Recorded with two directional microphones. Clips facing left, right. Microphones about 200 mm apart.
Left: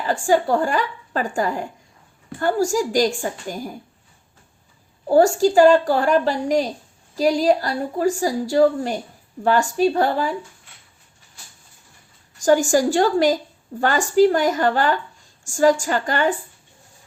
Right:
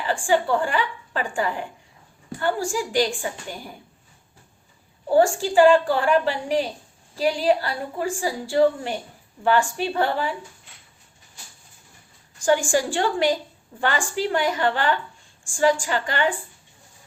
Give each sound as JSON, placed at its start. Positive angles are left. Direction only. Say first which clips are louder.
{"t": 0.0, "sound": "a woman's voice", "louder": "left 3 dB", "side_deg": 40}
{"t": 5.0, "sound": "a woman's voice", "louder": "left 4 dB", "side_deg": 40}
{"t": 12.4, "sound": "a woman's voice", "louder": "left 4 dB", "side_deg": 40}